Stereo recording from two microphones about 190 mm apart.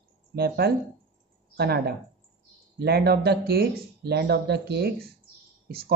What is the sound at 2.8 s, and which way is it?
Speech, 60° right (ahead or behind).